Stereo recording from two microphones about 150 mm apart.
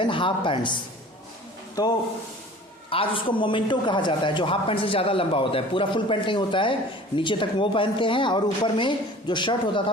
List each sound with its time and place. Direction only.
0.0 s a man's voice: 35° left (ahead or behind)
1.8 s speech: 25° left (ahead or behind)
2.9 s a man's voice: 35° left (ahead or behind)